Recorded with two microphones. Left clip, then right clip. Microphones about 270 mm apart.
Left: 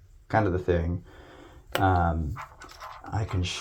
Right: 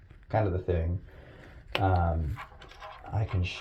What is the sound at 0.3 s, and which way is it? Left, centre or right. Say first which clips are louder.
Speech: left 4 dB; left.